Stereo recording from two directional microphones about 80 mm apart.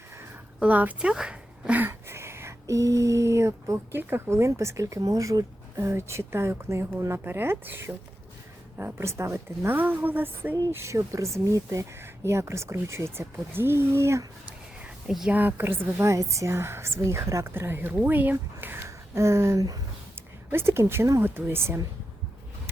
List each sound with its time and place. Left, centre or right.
0.6 s speech: centre
1.8 s speech: right
9.0 s speech: right
9.7 s speech: right
14.8 s a sound: centre
15.3 s speech: right
18.9 s a sound: right
20.1 s speech: right